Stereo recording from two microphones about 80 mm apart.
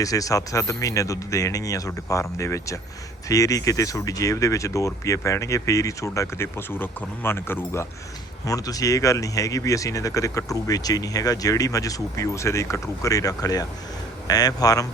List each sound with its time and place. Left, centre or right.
0.0 s speech: left
8.4 s speech: left